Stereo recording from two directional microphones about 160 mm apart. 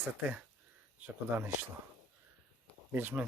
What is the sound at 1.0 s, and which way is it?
Speech, 15° right (ahead or behind).